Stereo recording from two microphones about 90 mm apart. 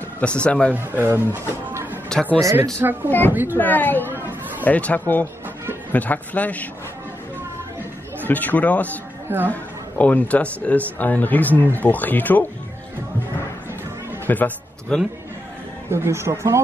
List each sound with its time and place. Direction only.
0.2 s speech: 10° left (ahead or behind)
0.7 s speech: 25° right (ahead or behind)
2.1 s speech: 5° left (ahead or behind)
2.8 s speech: 25° right (ahead or behind)
3.1 s speech: 20° left (ahead or behind)
4.1 s chatter: 25° right (ahead or behind)
4.6 s speech: 15° left (ahead or behind)
8.2 s speech: 20° left (ahead or behind)
14.2 s a man's voice: 20° left (ahead or behind)
14.9 s speech: 5° left (ahead or behind)
15.9 s speech: 30° right (ahead or behind)